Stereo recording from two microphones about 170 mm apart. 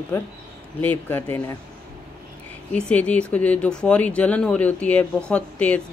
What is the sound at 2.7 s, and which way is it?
Speech, 10° left (ahead or behind).